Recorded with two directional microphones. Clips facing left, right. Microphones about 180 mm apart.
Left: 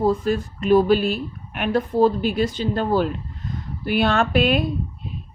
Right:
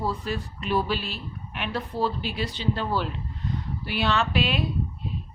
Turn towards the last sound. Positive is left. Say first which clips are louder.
# left 6 dB
turn(degrees=50)  # may be behind; listen again after turning